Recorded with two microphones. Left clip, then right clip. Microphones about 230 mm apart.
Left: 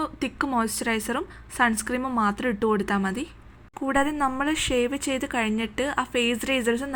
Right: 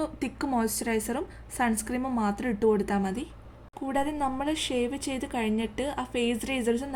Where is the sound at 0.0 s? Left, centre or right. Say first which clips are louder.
Left 4 dB; centre.